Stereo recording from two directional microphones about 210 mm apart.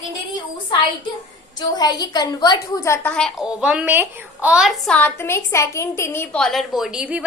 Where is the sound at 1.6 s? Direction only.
20° left (ahead or behind).